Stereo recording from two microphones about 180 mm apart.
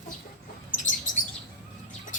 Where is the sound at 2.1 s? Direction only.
45° left (ahead or behind).